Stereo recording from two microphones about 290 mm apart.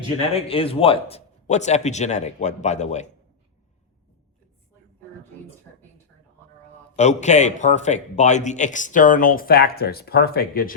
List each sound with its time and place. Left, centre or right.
0.3 s a man's voice: centre
6.9 s a man's voice: left